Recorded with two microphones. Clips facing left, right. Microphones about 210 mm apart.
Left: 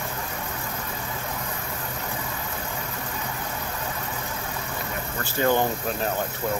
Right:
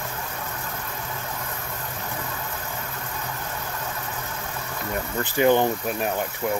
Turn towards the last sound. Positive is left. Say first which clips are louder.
# right 2 dB
turn(degrees=-15)  # may be behind; listen again after turning